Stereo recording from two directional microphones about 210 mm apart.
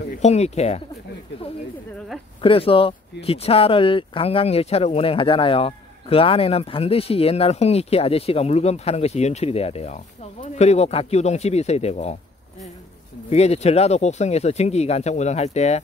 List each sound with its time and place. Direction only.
0.2 s speech: 30° left (ahead or behind)
2.4 s speech: 25° left (ahead or behind)
13.3 s speech: 30° left (ahead or behind)